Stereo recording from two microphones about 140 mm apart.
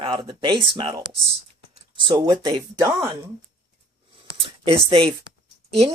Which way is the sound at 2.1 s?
30° right (ahead or behind).